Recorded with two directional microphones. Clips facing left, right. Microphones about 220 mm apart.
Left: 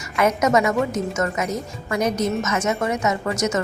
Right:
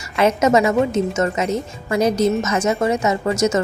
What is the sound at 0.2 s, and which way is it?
A woman's voice, 30° right (ahead or behind).